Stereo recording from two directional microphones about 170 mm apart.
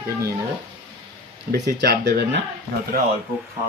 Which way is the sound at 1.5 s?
65° right (ahead or behind).